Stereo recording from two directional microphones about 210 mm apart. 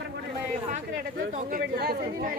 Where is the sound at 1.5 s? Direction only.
45° right (ahead or behind).